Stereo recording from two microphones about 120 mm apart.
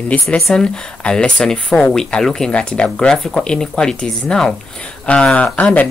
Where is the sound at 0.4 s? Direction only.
5° left (ahead or behind).